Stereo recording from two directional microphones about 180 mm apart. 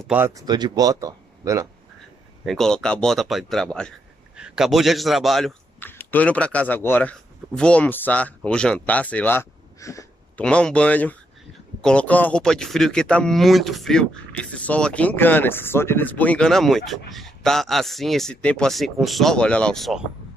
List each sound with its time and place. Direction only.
0.0 s speech: 10° right (ahead or behind)
0.4 s speech: 25° right (ahead or behind)
2.4 s a man's voice: centre (ahead or behind); by 10.4 s 15° left (ahead or behind)
10.4 s speech: 5° left (ahead or behind)